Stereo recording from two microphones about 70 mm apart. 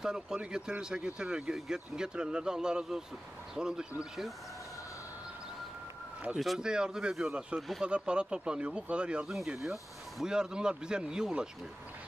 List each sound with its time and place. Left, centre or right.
0.0 s speech: centre
6.6 s speech: centre
9.3 s speech: centre